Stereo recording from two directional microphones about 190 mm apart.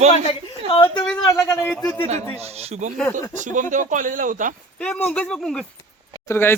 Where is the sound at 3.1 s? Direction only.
15° left (ahead or behind).